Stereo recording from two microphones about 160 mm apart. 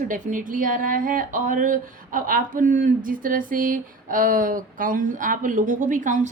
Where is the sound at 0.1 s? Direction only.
55° right (ahead or behind).